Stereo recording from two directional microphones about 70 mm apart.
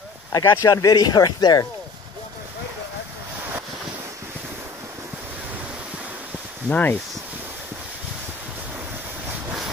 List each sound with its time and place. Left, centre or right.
0.3 s speech: left
6.7 s speech: left